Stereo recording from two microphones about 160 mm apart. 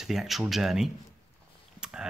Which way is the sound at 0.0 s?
Centre (ahead or behind).